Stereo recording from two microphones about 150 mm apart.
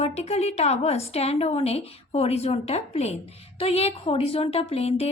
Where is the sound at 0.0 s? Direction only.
45° left (ahead or behind).